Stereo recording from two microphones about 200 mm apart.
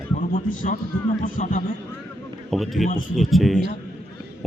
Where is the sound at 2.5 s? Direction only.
Centre (ahead or behind).